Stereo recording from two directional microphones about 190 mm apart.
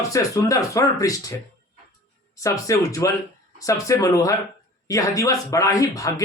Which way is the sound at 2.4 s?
15° left (ahead or behind).